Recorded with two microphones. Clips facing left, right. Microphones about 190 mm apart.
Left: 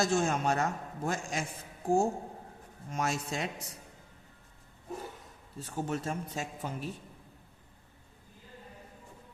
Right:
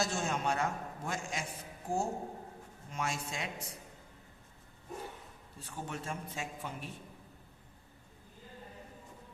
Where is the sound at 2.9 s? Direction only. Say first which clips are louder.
Left 5 dB; 40° left (ahead or behind).